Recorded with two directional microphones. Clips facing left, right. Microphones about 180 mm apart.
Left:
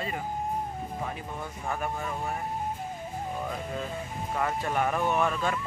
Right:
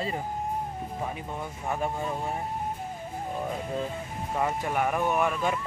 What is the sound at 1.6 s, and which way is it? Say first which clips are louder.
Speech: right 3 dB; 20° right (ahead or behind).